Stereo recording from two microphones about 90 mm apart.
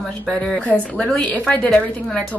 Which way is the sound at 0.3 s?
10° left (ahead or behind).